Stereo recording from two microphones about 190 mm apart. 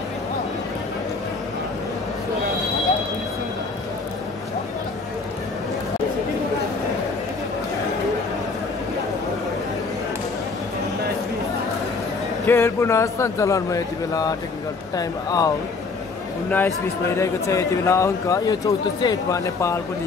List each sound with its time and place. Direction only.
12.4 s speech: 15° left (ahead or behind)